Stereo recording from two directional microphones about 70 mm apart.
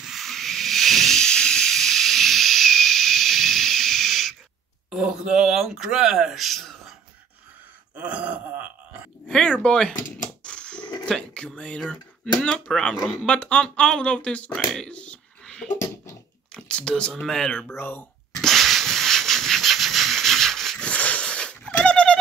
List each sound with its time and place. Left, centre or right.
0.0 s hiss: centre
4.9 s a sound: centre
7.9 s groan: right
9.3 s speech: centre
10.4 s a sound: centre
11.1 s speech: centre
14.9 s a sound: centre
16.5 s speech: centre
17.7 s speech: left
18.3 s rub: centre